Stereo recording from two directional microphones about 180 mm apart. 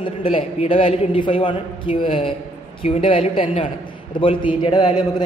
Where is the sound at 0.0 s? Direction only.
30° left (ahead or behind).